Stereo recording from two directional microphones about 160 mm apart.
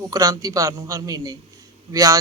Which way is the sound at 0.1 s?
20° right (ahead or behind).